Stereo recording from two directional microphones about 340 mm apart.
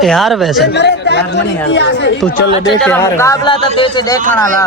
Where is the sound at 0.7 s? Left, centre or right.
Left.